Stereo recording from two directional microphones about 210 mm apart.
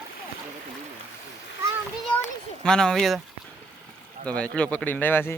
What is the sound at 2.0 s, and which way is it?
A child's voice, 5° left (ahead or behind).